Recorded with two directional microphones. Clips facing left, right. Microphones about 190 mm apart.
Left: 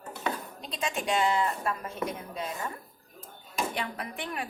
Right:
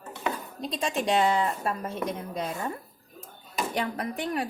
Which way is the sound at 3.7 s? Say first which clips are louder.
Right 5 dB; 40° right (ahead or behind).